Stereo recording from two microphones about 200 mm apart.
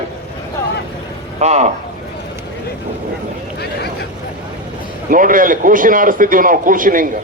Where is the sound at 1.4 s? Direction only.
35° right (ahead or behind).